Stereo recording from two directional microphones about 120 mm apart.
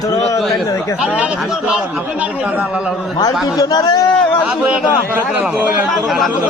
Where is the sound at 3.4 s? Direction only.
30° left (ahead or behind).